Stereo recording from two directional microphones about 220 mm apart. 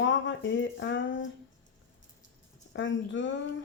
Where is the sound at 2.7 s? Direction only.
55° left (ahead or behind).